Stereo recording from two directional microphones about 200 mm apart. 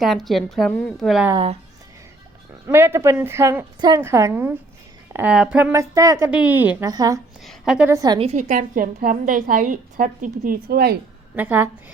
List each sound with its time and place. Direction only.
0.0 s a woman's voice: centre (ahead or behind)
1.3 s speech: 25° right (ahead or behind)
2.6 s a woman's voice: 10° right (ahead or behind)
7.4 s a woman's voice: 5° right (ahead or behind)
8.2 s a woman's voice: 35° right (ahead or behind)
11.3 s a woman's voice: 10° right (ahead or behind)